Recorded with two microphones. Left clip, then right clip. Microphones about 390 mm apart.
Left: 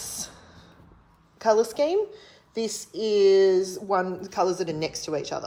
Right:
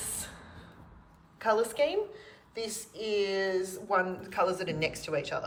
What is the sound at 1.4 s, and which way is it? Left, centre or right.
Speech, centre.